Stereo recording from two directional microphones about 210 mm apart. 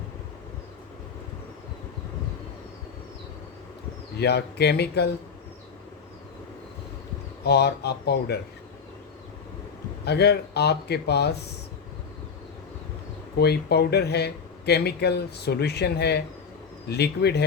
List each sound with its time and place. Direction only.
4.2 s speech: 50° left (ahead or behind)
7.4 s speech: 50° left (ahead or behind)
10.1 s speech: 50° left (ahead or behind)
13.4 s speech: 50° left (ahead or behind)